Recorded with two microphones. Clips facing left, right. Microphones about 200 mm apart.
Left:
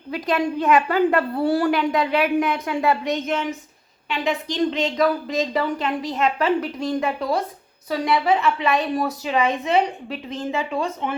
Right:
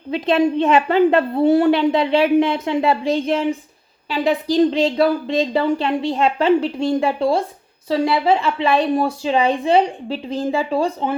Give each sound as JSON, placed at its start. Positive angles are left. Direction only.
{"t": 0.1, "sound": "a woman's voice", "side_deg": -25}